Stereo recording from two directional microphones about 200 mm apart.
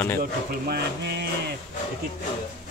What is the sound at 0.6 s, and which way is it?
Speech, 55° right (ahead or behind).